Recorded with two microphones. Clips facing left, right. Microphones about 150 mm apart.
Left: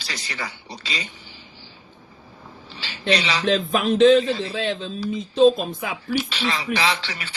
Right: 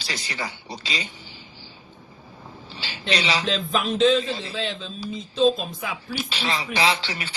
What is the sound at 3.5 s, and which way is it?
A woman's voice, 50° left (ahead or behind).